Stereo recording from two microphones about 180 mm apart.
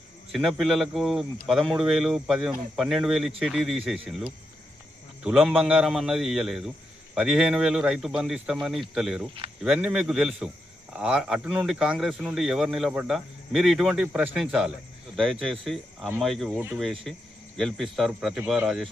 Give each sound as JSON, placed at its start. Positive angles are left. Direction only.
{"t": 0.3, "sound": "speech", "side_deg": 0}
{"t": 5.2, "sound": "speech", "side_deg": -5}